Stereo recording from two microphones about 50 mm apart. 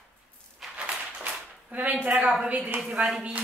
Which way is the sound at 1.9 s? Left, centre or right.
Right.